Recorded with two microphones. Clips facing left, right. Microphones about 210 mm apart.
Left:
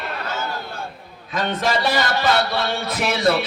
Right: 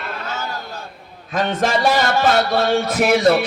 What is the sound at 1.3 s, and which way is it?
Music, 50° right (ahead or behind).